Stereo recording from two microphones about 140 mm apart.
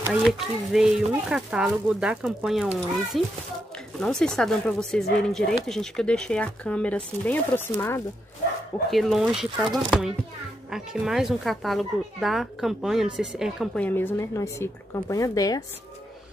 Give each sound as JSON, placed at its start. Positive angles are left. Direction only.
{"t": 0.1, "sound": "speech", "side_deg": -5}
{"t": 8.9, "sound": "speech", "side_deg": 0}
{"t": 13.7, "sound": "a woman's voice", "side_deg": 15}